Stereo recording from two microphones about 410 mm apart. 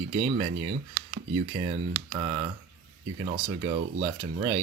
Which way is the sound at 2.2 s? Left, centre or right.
Centre.